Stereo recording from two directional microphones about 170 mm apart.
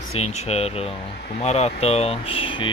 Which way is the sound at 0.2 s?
40° left (ahead or behind).